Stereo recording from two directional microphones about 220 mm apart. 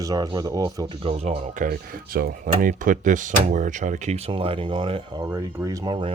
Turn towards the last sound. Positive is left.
turn(degrees=-20)  # may be behind; listen again after turning